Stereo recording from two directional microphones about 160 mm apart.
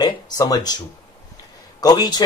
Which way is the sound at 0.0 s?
25° left (ahead or behind).